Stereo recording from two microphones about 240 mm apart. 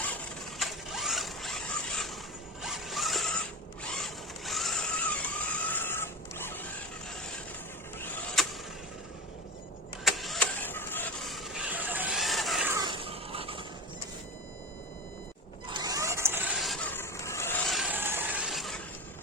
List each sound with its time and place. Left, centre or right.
0.6 s mechanisms: centre
2.6 s zipper: centre
3.9 s vehicle: centre
7.9 s power windows: centre
10.0 s vehicle: centre
12.8 s a sound: right
15.7 s vehicle: centre